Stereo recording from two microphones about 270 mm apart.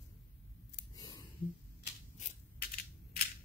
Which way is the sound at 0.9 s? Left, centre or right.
Centre.